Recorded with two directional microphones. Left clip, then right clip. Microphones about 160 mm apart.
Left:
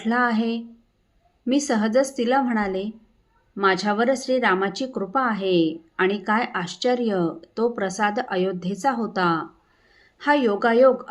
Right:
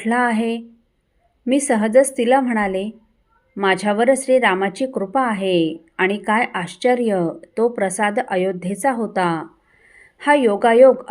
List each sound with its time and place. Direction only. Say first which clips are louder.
0.0 s speech: right 3 dB; 20° right (ahead or behind)